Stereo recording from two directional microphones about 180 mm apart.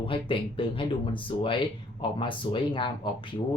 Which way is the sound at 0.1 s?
30° left (ahead or behind).